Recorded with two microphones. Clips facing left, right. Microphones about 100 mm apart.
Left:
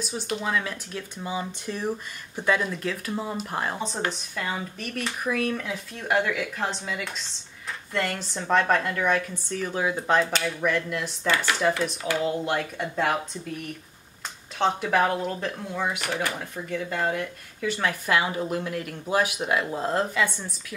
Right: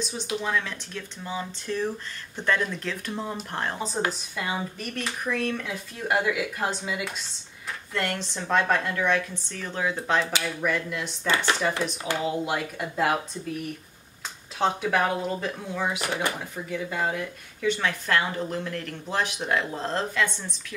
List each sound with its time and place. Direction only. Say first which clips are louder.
0.0 s speech: even; 5° left (ahead or behind)
11.2 s speech: even; 25° right (ahead or behind)
12.3 s speech: left 1 dB; 5° right (ahead or behind)
14.6 s speech: left 1 dB; 5° right (ahead or behind)
16.0 s speech: even; 20° right (ahead or behind)
16.6 s speech: left 1 dB; 5° right (ahead or behind); by 20.5 s 10° left (ahead or behind)